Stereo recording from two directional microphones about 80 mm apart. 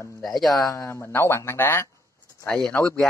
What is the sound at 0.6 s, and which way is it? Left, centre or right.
Speech, left.